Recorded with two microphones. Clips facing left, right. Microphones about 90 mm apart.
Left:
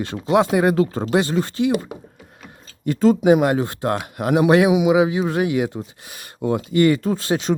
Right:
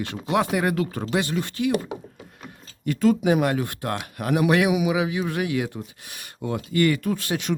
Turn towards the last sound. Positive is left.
turn(degrees=30)  # may be behind; listen again after turning